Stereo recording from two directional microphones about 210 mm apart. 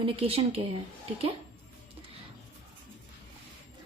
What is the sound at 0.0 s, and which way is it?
Speech, 25° right (ahead or behind).